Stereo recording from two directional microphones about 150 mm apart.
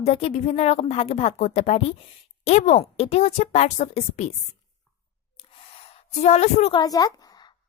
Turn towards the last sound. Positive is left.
turn(degrees=25)  # may be behind; listen again after turning